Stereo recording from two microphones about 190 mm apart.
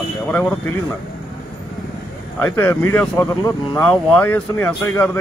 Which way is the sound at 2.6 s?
10° left (ahead or behind).